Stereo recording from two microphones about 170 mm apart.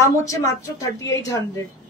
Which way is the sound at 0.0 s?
20° left (ahead or behind).